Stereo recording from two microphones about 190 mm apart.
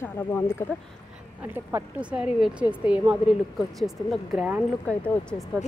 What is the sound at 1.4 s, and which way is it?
Speech, 10° right (ahead or behind).